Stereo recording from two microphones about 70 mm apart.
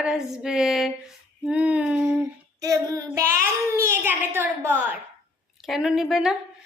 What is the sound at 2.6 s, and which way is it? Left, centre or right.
Child singing, right.